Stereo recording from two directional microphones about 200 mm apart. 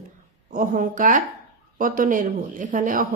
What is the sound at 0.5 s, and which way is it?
A woman's voice, 40° right (ahead or behind).